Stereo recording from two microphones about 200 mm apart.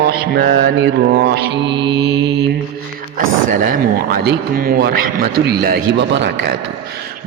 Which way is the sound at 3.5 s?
45° right (ahead or behind).